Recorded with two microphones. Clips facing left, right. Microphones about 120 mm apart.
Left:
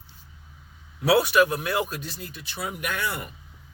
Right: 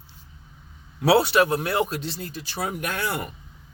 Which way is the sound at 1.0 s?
30° right (ahead or behind).